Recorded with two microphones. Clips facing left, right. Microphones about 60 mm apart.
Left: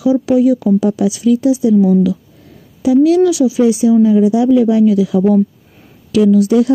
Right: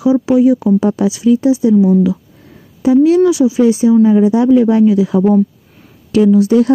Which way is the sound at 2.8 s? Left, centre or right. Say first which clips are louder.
Right 1 dB; right.